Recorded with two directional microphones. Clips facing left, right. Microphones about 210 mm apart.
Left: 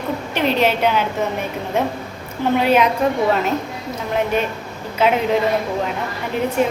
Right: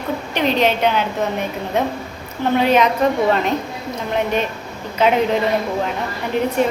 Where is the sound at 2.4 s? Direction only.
10° left (ahead or behind).